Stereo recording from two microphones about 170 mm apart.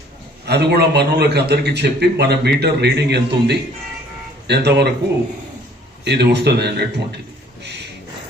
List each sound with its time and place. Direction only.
0.4 s a man's voice: 75° right (ahead or behind)
6.1 s speech: 75° right (ahead or behind)
7.6 s a sound: 80° right